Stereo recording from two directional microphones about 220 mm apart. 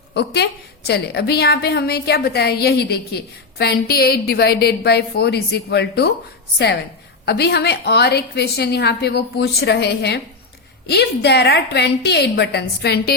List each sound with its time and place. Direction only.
0.1 s a woman's voice: 50° left (ahead or behind)
7.3 s a woman's voice: 45° left (ahead or behind)